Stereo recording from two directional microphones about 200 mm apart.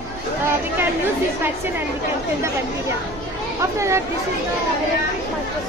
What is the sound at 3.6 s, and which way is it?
Speech, 15° right (ahead or behind).